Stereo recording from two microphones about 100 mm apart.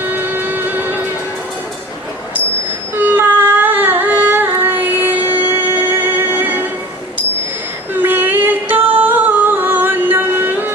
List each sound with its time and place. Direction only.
0.0 s music: 20° right (ahead or behind)
2.9 s a sound: 20° right (ahead or behind)
7.9 s music: 20° right (ahead or behind)